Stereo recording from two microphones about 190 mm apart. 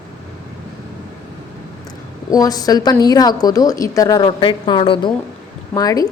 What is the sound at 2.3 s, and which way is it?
A woman's voice, 20° left (ahead or behind).